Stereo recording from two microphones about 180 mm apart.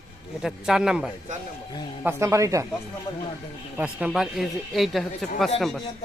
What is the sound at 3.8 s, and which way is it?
Speech, 5° right (ahead or behind).